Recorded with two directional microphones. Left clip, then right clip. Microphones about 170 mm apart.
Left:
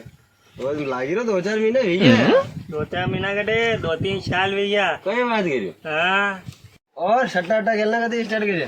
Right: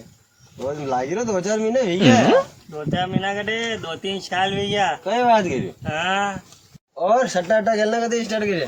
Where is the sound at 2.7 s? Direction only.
40° right (ahead or behind).